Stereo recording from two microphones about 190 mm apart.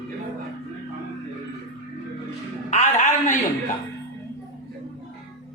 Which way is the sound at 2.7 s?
40° left (ahead or behind).